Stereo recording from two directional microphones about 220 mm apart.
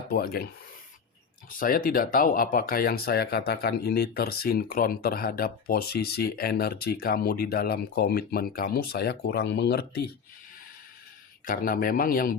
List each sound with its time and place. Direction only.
0.1 s speech: 45° left (ahead or behind)
1.5 s speech: 40° left (ahead or behind)
11.4 s speech: 40° left (ahead or behind)